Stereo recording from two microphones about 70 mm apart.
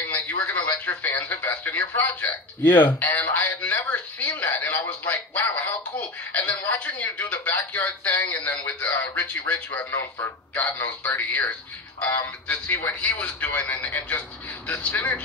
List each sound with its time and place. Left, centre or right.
0.0 s a man's voice: left